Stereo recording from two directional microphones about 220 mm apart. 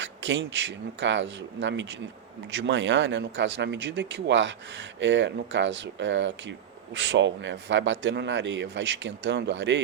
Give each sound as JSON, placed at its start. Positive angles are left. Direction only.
{"t": 0.0, "sound": "speech", "side_deg": -55}